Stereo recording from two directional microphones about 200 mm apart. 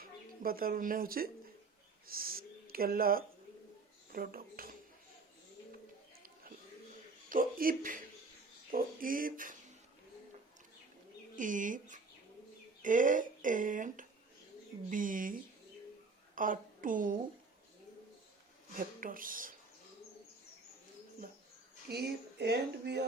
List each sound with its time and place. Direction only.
0.0 s speech: 45° right (ahead or behind)
7.3 s speech: 45° right (ahead or behind)
11.3 s a woman's voice: 40° right (ahead or behind)
18.8 s speech: 45° right (ahead or behind)
21.8 s speech: 55° right (ahead or behind)